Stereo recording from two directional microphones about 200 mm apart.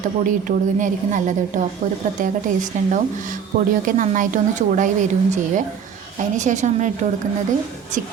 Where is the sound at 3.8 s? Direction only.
40° right (ahead or behind).